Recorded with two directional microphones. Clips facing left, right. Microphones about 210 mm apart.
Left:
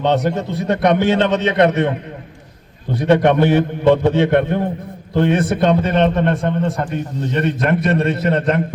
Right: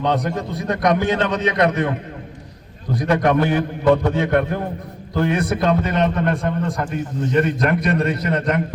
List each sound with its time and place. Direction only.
0.0 s a man's voice: 25° left (ahead or behind)
2.9 s a man's voice: 30° left (ahead or behind)